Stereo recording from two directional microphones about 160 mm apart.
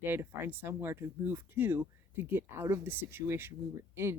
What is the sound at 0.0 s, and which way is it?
Speech, 15° right (ahead or behind).